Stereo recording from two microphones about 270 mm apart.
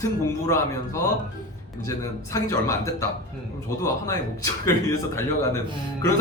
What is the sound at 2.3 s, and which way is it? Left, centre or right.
Speech, centre.